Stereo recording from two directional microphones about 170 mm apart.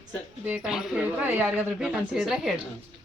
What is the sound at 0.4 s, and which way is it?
Speech, 5° right (ahead or behind).